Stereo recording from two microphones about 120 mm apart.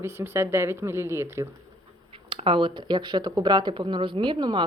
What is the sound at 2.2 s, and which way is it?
Speech, 50° right (ahead or behind).